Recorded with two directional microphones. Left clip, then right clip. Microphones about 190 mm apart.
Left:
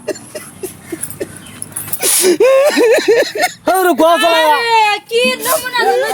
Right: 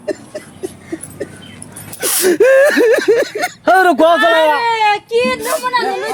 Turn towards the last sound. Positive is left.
turn(degrees=-15)  # may be behind; listen again after turning